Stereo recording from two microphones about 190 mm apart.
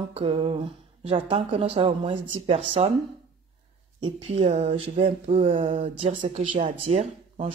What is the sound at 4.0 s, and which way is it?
Speech, 30° right (ahead or behind).